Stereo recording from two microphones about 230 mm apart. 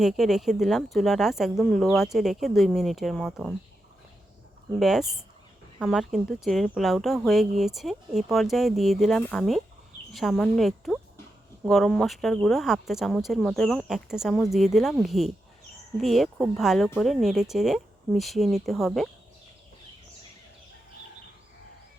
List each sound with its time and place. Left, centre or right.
0.0 s speech: centre
4.8 s speech: centre